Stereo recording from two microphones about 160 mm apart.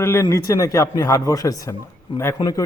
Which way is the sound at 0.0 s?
15° left (ahead or behind).